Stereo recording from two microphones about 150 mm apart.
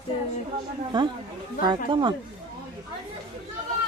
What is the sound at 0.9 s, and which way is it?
Speech, 30° right (ahead or behind).